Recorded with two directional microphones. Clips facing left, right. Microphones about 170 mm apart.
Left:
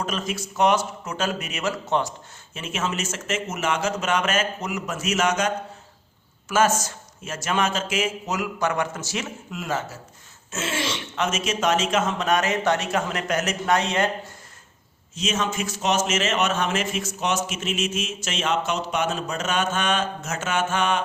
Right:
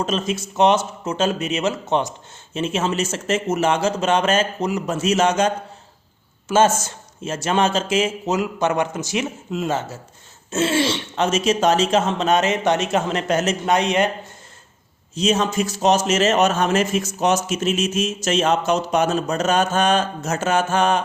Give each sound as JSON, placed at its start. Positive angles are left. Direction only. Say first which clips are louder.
{"t": 0.0, "sound": "speech", "louder": "right 5 dB", "side_deg": -25}
{"t": 15.1, "sound": "a man's voice", "louder": "right 7 dB", "side_deg": -35}